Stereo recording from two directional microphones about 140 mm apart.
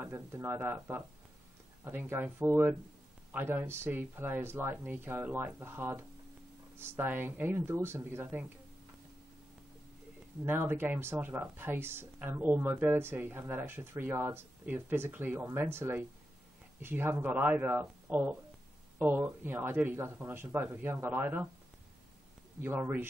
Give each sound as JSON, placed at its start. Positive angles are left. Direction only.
{"t": 0.0, "sound": "speech", "side_deg": -20}
{"t": 10.4, "sound": "speech", "side_deg": -15}
{"t": 22.6, "sound": "speech", "side_deg": -15}